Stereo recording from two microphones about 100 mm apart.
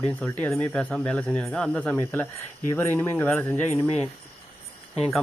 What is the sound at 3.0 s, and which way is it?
Speech, 20° left (ahead or behind).